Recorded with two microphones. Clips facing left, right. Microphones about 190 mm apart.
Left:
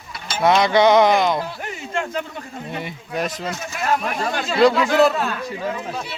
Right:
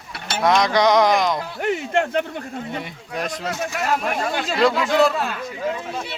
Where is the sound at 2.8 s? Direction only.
Centre (ahead or behind).